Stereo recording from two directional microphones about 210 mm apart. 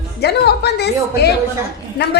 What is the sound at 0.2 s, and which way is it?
A woman's voice, 50° left (ahead or behind).